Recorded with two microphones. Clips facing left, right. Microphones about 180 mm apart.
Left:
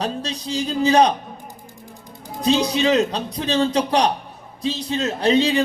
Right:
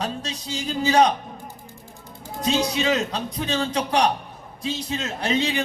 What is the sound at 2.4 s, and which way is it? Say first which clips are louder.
A man's voice: left 4 dB; 35° left (ahead or behind).